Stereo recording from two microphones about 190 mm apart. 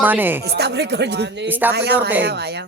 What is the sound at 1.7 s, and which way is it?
Speech, 60° right (ahead or behind).